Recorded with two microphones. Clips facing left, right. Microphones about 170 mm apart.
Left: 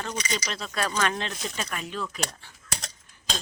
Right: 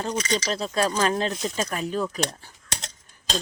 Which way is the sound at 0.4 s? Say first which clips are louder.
Right 6 dB; 35° right (ahead or behind).